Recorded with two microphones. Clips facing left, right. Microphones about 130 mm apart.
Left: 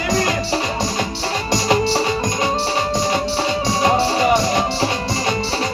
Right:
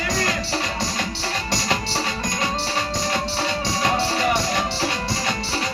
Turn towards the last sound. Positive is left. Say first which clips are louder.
# left 6 dB
turn(degrees=20)  # may be behind; listen again after turning